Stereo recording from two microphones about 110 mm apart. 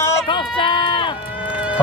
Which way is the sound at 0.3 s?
45° left (ahead or behind).